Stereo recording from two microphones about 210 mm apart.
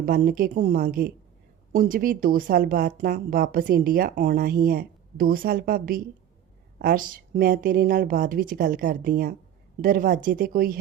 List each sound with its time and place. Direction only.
0.0 s speech: 45° right (ahead or behind)